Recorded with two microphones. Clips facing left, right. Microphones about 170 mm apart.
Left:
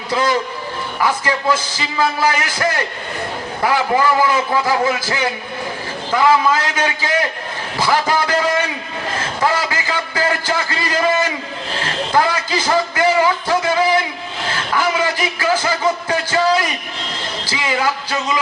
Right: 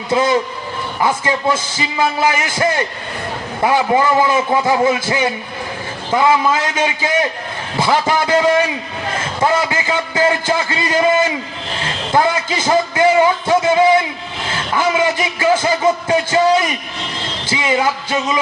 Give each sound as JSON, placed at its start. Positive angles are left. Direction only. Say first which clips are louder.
{"t": 0.1, "sound": "a man's voice", "louder": "right 3 dB", "side_deg": -20}
{"t": 9.4, "sound": "a sound", "louder": "right 3 dB", "side_deg": -25}
{"t": 17.5, "sound": "a man's voice", "louder": "right 3 dB", "side_deg": -20}